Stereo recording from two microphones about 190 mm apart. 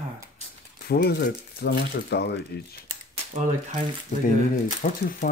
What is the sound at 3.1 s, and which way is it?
Speech, 35° right (ahead or behind).